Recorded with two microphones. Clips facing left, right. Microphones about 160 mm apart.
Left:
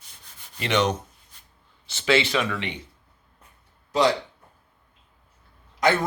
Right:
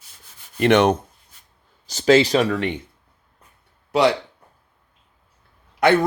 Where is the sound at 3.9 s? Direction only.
65° right (ahead or behind).